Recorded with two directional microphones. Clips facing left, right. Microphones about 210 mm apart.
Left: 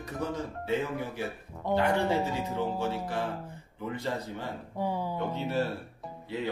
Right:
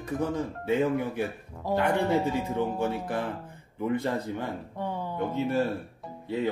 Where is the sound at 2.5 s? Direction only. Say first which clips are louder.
Right 3 dB; 55° right (ahead or behind).